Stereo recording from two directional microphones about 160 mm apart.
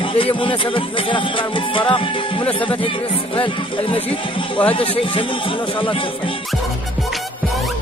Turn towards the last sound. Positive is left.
turn(degrees=30)  # may be behind; listen again after turning